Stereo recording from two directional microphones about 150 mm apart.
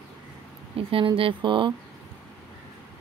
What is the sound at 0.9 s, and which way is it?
Speech, 35° right (ahead or behind).